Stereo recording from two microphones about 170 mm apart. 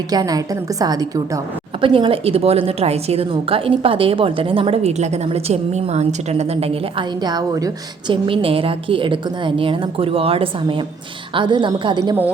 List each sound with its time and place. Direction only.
0.1 s a woman's voice: 20° right (ahead or behind)
7.3 s a woman's voice: 20° right (ahead or behind)